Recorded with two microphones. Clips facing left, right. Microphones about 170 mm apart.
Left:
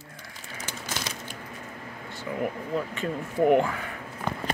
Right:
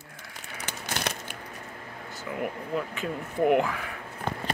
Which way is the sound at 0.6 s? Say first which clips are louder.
Right 2 dB; 65° right (ahead or behind).